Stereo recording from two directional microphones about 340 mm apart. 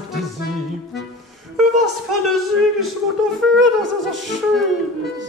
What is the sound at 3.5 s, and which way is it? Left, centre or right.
Wind instrument, right.